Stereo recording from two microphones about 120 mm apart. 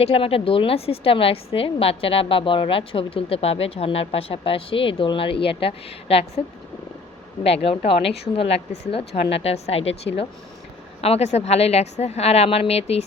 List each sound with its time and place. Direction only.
0.0 s a woman's voice: 55° left (ahead or behind)
7.4 s a woman's voice: 55° left (ahead or behind)